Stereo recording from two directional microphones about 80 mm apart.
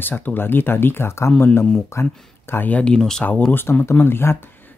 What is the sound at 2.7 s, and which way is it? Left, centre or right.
Speech, centre.